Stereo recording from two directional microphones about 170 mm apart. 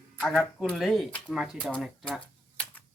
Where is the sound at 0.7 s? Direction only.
Centre (ahead or behind).